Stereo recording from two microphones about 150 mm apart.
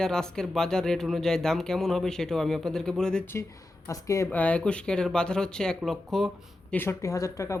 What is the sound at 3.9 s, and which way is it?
Speech, 20° left (ahead or behind).